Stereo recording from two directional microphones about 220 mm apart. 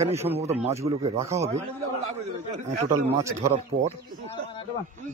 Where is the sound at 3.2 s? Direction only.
15° right (ahead or behind).